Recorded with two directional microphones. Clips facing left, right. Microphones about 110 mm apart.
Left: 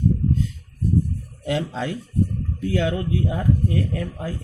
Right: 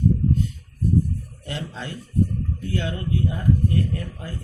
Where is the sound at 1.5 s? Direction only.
90° left.